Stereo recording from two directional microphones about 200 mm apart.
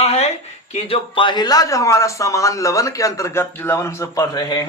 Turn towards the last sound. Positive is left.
turn(degrees=20)  # may be behind; listen again after turning